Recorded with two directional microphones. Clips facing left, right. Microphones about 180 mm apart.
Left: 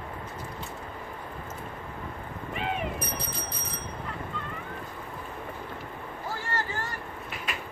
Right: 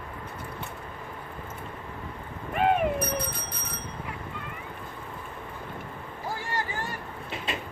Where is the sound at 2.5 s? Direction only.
55° right (ahead or behind).